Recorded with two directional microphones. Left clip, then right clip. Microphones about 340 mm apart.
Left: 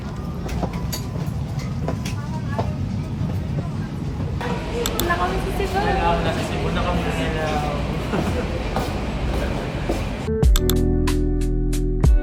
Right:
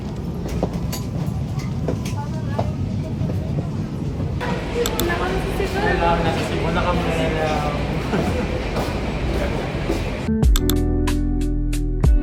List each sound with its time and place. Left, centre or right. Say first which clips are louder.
4.4 s a sound: right 3 dB; centre
8.1 s music: right 2 dB; centre
10.4 s music: left 1 dB; centre